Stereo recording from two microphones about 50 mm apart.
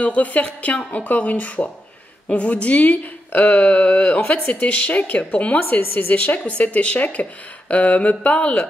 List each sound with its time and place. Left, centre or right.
0.0 s a woman's voice: left